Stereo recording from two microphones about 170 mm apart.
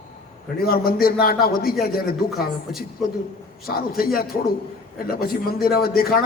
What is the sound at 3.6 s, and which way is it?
A man's voice, 60° left (ahead or behind).